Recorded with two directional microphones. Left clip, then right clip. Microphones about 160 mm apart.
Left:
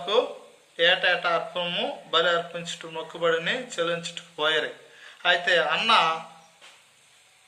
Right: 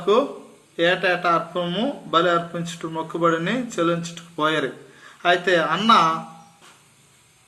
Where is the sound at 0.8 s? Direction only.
25° left (ahead or behind).